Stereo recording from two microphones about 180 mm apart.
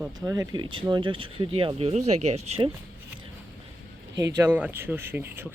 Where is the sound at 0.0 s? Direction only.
20° right (ahead or behind); by 2.6 s 35° right (ahead or behind).